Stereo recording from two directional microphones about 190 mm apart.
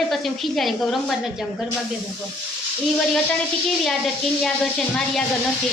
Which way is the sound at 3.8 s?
Centre (ahead or behind).